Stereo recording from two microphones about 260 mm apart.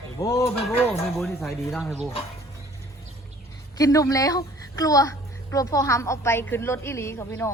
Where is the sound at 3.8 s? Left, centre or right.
Centre.